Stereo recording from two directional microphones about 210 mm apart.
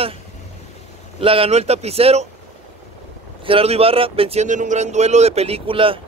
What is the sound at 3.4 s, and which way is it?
Speech, 25° right (ahead or behind).